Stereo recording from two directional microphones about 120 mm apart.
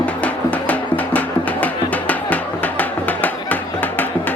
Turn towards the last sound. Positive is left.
turn(degrees=15)  # may be behind; listen again after turning